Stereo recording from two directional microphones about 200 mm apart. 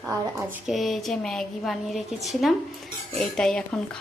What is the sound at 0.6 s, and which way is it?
A woman's voice, centre (ahead or behind).